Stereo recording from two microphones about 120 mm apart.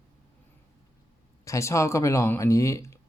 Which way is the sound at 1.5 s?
25° left (ahead or behind).